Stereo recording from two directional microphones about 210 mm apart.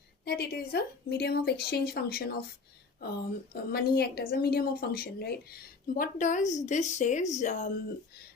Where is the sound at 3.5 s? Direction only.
45° left (ahead or behind).